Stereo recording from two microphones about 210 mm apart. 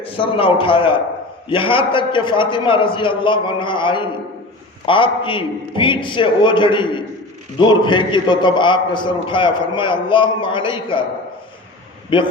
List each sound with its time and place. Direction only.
0.0 s a man's voice: 25° left (ahead or behind)
12.1 s a man's voice: 25° left (ahead or behind)